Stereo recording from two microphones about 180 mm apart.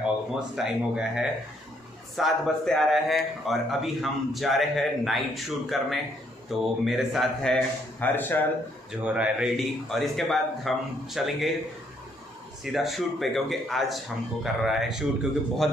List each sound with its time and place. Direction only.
0.0 s a man's voice: 5° right (ahead or behind)
9.0 s a man's voice: 5° right (ahead or behind)
12.7 s a man's voice: centre (ahead or behind)